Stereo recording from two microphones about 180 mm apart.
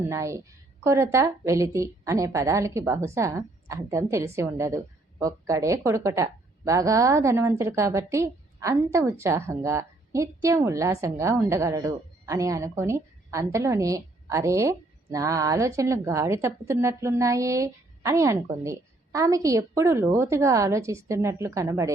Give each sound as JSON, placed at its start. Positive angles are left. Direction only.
{"t": 0.1, "sound": "a woman's voice", "side_deg": -15}